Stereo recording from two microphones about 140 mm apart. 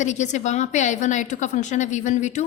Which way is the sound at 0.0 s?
60° left (ahead or behind).